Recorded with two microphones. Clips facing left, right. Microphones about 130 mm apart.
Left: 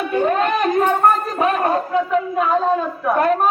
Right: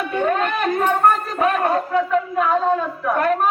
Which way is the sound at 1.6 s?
15° left (ahead or behind).